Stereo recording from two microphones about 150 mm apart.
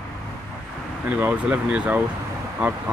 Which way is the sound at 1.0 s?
10° right (ahead or behind).